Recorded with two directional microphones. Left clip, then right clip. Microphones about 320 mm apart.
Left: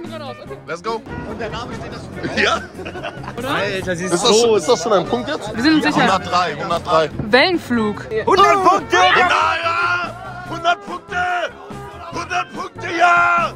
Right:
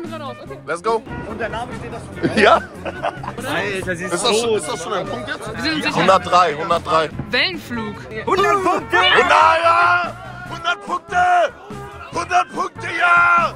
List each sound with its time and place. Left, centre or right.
0.7 s speech: centre
1.4 s speech: right
2.2 s speech: centre; by 6.0 s left
6.0 s speech: centre
7.2 s speech: left
9.2 s speech: centre
10.5 s speech: centre
10.9 s speech: centre
12.1 s music: centre
12.9 s speech: centre